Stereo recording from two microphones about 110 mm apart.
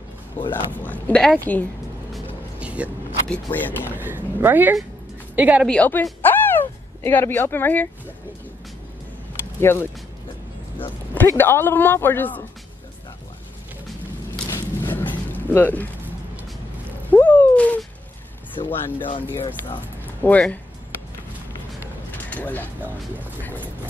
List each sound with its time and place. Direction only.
0.4 s a woman's voice: 15° left (ahead or behind)
2.6 s vehicle: 10° right (ahead or behind)
3.5 s a woman's voice: 15° left (ahead or behind)
3.9 s speech: 20° right (ahead or behind)
5.7 s a woman's voice: 15° left (ahead or behind)
6.2 s a sound: 20° left (ahead or behind)
9.6 s speech: 20° left (ahead or behind)
11.1 s a man's voice: 20° left (ahead or behind)
14.5 s a sound: 20° left (ahead or behind)
17.1 s a sound: 15° left (ahead or behind)
18.7 s a woman's voice: 20° left (ahead or behind)
20.2 s a woman's voice: 10° left (ahead or behind)
22.1 s a sound: 15° left (ahead or behind)